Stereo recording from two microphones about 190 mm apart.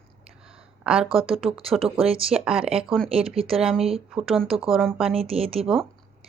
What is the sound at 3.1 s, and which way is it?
Speech, 30° right (ahead or behind).